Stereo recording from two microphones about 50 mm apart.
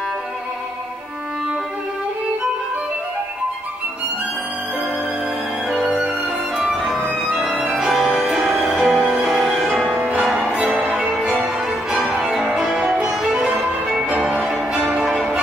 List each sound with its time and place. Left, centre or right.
5.7 s music: centre
9.0 s music: centre
9.9 s music: right
11.0 s music: centre
13.2 s music: right